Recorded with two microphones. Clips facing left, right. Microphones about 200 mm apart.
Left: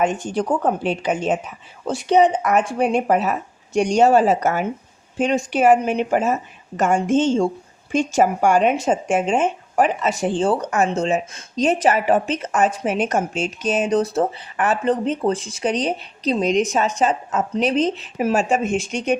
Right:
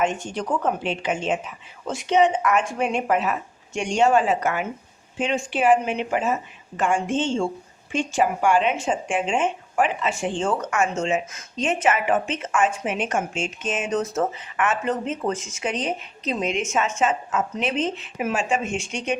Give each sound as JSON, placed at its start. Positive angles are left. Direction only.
{"t": 0.0, "sound": "speech", "side_deg": 35}